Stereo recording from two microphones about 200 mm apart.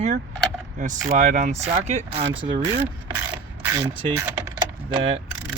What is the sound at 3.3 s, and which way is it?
Mechanisms, 20° right (ahead or behind).